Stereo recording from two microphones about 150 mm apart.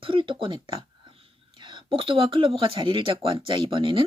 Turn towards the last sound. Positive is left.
turn(degrees=-35)  # may be behind; listen again after turning